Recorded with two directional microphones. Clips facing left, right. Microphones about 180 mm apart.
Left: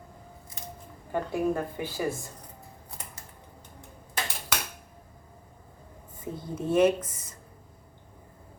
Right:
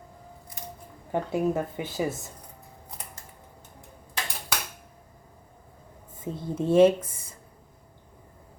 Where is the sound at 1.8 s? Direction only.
20° right (ahead or behind).